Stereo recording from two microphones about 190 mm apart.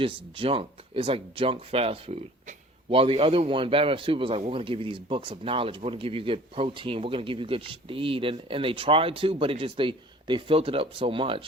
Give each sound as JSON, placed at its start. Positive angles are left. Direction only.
{"t": 0.0, "sound": "speech", "side_deg": -30}